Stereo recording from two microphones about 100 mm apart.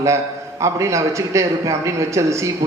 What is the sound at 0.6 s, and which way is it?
A man's voice, 30° right (ahead or behind).